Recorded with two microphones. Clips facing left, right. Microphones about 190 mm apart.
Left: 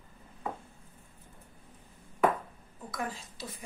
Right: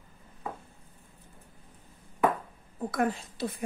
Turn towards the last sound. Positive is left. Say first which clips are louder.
# right 10 dB
turn(degrees=-60)  # may be behind; listen again after turning